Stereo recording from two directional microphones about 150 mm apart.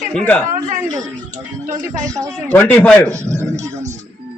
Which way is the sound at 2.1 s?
20° right (ahead or behind).